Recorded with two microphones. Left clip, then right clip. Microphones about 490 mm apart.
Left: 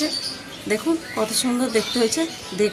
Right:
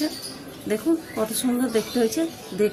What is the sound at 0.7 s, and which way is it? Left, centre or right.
Speech, right.